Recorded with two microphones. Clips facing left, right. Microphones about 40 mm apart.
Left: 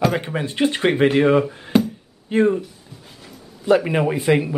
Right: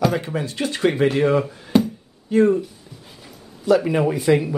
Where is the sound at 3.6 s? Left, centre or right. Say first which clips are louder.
Even; left.